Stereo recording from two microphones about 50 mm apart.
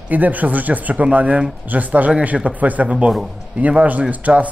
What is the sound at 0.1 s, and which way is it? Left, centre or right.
Speech, right.